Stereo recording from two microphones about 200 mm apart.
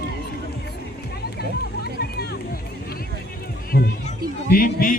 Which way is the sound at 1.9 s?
50° left (ahead or behind).